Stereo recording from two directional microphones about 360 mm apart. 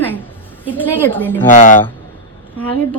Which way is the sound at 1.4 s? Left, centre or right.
Left.